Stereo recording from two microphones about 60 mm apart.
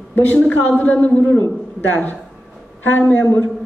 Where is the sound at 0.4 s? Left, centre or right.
Left.